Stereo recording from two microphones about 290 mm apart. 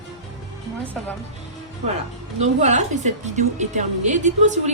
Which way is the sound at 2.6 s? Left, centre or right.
Right.